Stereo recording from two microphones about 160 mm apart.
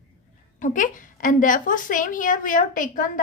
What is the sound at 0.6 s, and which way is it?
A woman's voice, 55° left (ahead or behind).